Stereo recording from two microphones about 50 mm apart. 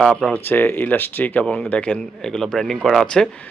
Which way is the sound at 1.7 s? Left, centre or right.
Left.